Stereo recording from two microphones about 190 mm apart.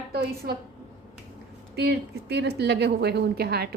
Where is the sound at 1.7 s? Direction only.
60° right (ahead or behind).